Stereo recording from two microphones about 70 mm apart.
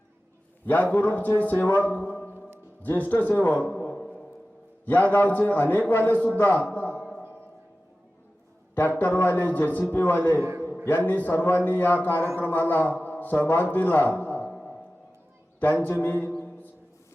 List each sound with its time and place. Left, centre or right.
0.6 s a man's voice: left
3.9 s a sound: centre
4.9 s a man's voice: left
8.7 s a man's voice: left
15.8 s a man's voice: left